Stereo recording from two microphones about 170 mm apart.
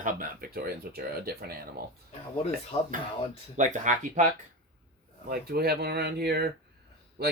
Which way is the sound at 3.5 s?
45° right (ahead or behind).